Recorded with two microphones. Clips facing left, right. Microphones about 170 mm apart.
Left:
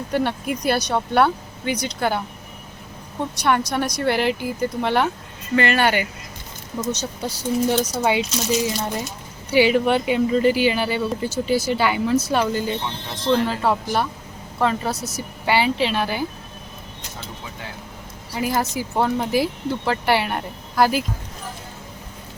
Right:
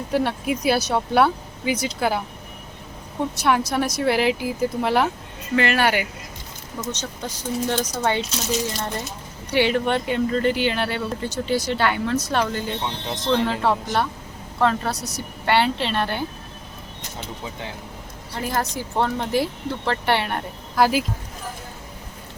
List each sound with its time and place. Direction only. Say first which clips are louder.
0.1 s speech: right 1 dB; centre (ahead or behind)
3.3 s speech: left 1 dB; centre (ahead or behind)
6.9 s speech: left 4 dB; 10° left (ahead or behind)
18.3 s speech: left 3 dB; 5° left (ahead or behind)